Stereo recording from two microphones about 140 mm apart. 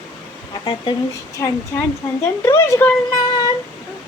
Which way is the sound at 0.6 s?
35° left (ahead or behind).